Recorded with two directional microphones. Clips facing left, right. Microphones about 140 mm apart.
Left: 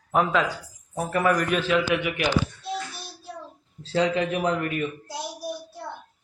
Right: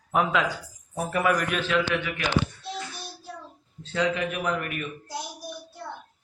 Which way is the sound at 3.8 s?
30° left (ahead or behind).